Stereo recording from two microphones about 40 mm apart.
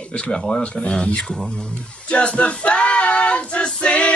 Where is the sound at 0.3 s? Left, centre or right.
Centre.